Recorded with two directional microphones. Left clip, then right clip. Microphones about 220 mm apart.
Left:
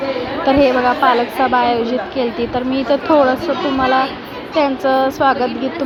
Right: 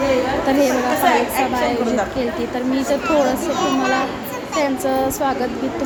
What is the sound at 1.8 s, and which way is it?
Speech, 15° left (ahead or behind).